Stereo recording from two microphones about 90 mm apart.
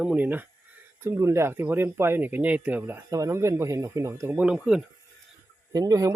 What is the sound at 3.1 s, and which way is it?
Speech, 35° right (ahead or behind).